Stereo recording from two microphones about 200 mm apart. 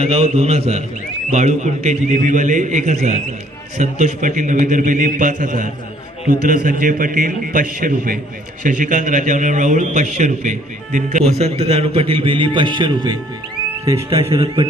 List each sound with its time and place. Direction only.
0.0 s a man's voice: 30° right (ahead or behind)